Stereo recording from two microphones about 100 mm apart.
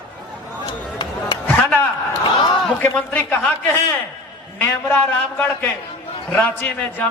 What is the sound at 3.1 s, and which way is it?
Speech, 15° left (ahead or behind).